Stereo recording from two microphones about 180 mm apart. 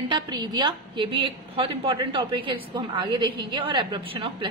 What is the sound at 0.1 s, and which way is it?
A woman's voice, 25° right (ahead or behind).